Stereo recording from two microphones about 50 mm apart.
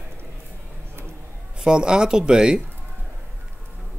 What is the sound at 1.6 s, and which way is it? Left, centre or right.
Speech, centre.